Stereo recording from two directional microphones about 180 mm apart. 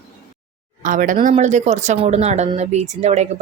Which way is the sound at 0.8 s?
45° right (ahead or behind).